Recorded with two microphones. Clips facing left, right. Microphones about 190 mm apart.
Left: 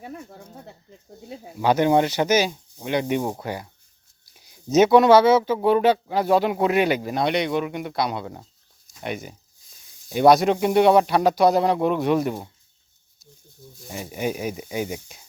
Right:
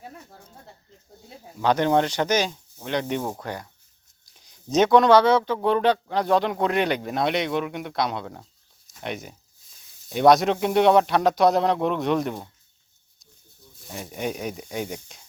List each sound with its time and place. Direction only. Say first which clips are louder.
0.0 s a sound: left 6 dB; 65° left (ahead or behind)
1.5 s speech: left 2 dB; 10° left (ahead or behind)
13.8 s speech: left 3 dB; 5° left (ahead or behind)